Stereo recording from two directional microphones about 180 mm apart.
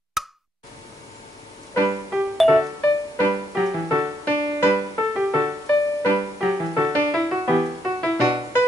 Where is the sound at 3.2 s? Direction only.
15° right (ahead or behind).